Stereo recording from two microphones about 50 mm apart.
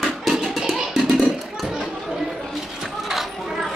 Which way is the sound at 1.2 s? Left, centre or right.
Centre.